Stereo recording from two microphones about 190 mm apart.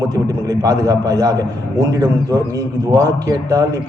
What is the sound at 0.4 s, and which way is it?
A man's voice, 20° right (ahead or behind).